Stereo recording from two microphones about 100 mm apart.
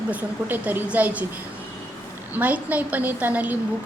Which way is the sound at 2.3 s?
15° right (ahead or behind).